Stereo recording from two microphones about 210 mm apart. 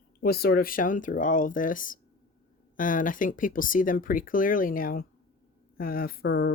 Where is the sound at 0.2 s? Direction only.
45° left (ahead or behind).